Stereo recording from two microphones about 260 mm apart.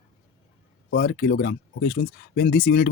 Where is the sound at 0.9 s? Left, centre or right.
Left.